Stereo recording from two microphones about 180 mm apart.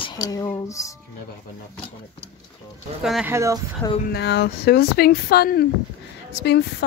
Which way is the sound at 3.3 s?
15° right (ahead or behind).